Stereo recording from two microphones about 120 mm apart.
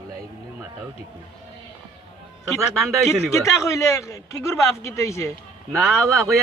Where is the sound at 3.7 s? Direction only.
25° left (ahead or behind).